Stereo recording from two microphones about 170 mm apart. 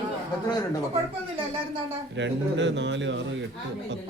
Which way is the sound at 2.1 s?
90° right.